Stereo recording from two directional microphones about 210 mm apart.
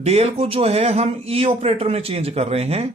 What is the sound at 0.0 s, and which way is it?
Speech, 30° right (ahead or behind).